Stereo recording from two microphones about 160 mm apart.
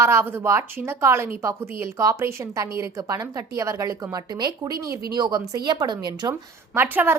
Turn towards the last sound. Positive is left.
turn(degrees=-10)  # may be behind; listen again after turning